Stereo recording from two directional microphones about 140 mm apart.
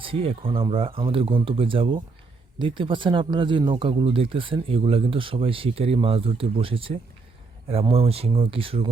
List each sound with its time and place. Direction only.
0.0 s speech: 40° right (ahead or behind)